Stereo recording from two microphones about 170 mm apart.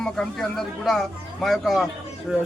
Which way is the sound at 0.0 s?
5° left (ahead or behind).